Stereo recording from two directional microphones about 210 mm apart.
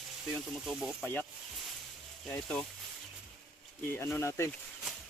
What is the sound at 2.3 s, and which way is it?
Speech, 5° left (ahead or behind).